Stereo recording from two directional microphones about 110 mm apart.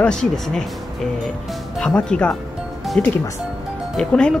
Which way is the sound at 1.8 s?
5° left (ahead or behind).